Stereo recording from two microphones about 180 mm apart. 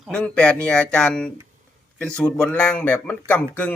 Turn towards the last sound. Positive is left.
turn(degrees=10)  # may be behind; listen again after turning